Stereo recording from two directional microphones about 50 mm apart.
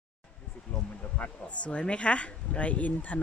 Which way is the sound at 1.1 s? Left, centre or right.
Left.